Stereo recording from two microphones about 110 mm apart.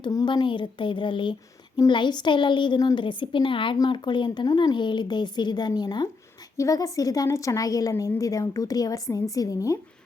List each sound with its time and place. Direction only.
0.3 s a woman's voice: 45° left (ahead or behind); by 9.7 s 30° left (ahead or behind)